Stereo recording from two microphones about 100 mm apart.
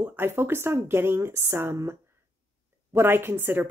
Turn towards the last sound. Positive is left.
turn(degrees=-20)  # may be behind; listen again after turning